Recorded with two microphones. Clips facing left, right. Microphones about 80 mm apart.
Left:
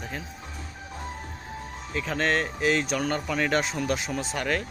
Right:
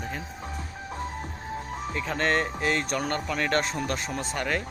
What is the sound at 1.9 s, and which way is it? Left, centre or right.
Speech, centre.